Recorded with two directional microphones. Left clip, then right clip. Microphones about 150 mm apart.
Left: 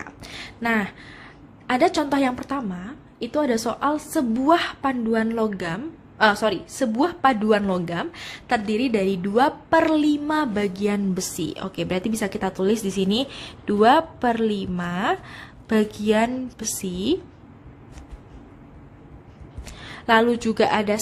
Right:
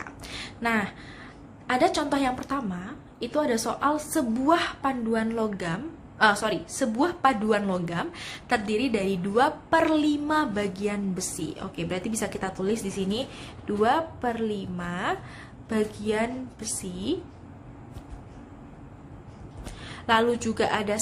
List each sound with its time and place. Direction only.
0.0 s a sound: 45° left (ahead or behind)
1.6 s a woman's voice: 45° left (ahead or behind)
19.8 s a woman's voice: 50° left (ahead or behind)